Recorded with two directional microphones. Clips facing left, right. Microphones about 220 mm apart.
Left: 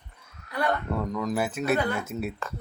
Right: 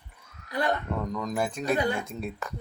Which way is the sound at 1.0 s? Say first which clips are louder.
Left 2 dB; 5° left (ahead or behind).